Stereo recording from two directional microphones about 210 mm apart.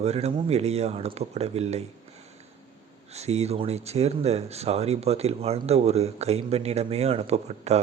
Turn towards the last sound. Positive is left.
turn(degrees=-30)  # may be behind; listen again after turning